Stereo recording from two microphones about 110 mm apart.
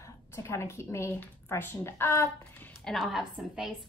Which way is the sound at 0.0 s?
25° left (ahead or behind).